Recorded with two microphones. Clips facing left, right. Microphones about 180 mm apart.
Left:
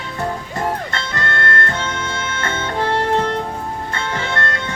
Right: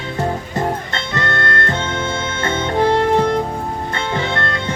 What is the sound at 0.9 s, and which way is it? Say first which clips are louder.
Music: right 2 dB; 20° right (ahead or behind).